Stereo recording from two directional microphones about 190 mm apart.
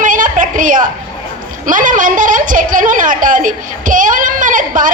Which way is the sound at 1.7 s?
45° right (ahead or behind).